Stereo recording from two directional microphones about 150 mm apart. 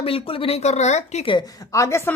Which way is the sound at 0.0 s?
40° left (ahead or behind).